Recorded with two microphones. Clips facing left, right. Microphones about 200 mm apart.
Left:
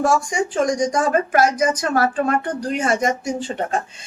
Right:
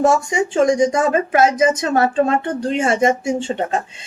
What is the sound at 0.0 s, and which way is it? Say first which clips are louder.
Speech: right 3 dB; 25° right (ahead or behind).